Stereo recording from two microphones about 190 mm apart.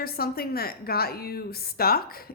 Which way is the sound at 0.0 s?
55° left (ahead or behind).